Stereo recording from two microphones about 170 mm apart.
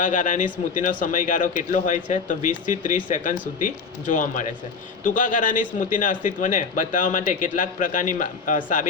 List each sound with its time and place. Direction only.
0.0 s a man's voice: 50° left (ahead or behind)